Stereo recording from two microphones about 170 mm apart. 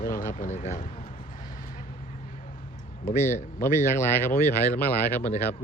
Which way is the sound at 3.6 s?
15° left (ahead or behind).